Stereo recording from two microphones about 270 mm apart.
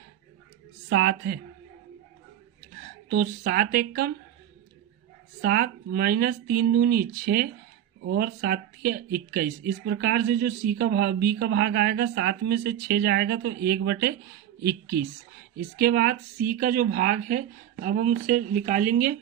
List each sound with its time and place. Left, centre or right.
0.9 s speech: right
3.1 s speech: right
5.4 s speech: right